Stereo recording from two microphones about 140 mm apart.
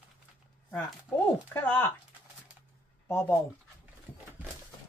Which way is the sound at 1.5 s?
15° left (ahead or behind).